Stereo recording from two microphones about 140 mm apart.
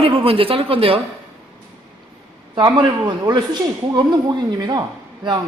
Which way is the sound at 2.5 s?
35° right (ahead or behind).